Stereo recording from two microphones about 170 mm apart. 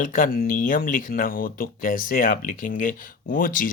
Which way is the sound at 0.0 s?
50° left (ahead or behind).